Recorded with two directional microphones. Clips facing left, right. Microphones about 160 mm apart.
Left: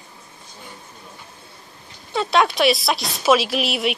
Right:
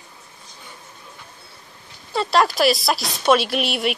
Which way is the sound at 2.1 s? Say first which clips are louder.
Even; centre (ahead or behind).